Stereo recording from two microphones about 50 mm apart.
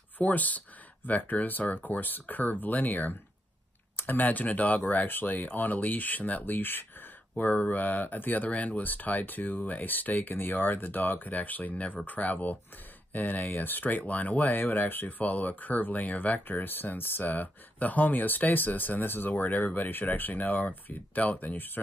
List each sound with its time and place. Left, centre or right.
0.2 s speech: left
7.3 s speech: left